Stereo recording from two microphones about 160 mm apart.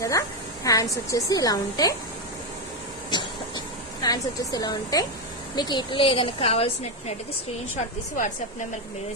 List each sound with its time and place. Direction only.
0.0 s a woman's voice: 20° left (ahead or behind)
3.1 s vehicle: 25° left (ahead or behind)
4.0 s a woman's voice: 25° left (ahead or behind)